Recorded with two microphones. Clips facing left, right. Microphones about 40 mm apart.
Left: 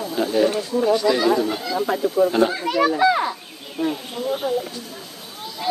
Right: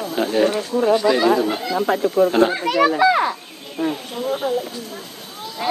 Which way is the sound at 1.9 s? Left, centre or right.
Right.